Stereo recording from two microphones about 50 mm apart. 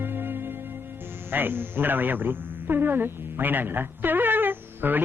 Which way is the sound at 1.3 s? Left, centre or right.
Right.